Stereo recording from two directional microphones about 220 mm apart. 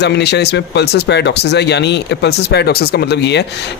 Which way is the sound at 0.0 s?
50° left (ahead or behind).